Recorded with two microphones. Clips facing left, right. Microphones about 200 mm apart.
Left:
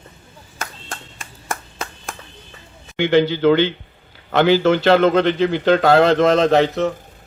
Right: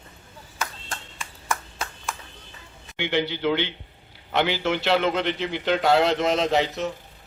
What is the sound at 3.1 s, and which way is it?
A man's voice, 90° left.